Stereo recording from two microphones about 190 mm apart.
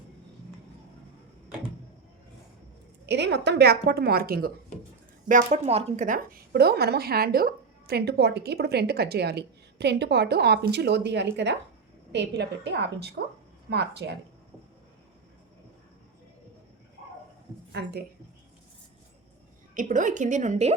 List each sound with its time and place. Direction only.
3.1 s a woman's voice: 65° right (ahead or behind)
5.3 s a woman's voice: 40° right (ahead or behind)
6.5 s a woman's voice: 55° right (ahead or behind)
17.7 s speech: 60° right (ahead or behind)
19.7 s a woman's voice: 40° right (ahead or behind)